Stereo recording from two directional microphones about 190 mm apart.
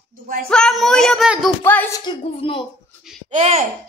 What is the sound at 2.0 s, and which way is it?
Speech, 25° left (ahead or behind).